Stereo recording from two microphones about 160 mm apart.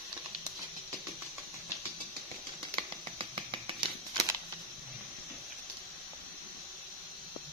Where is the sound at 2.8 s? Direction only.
30° right (ahead or behind).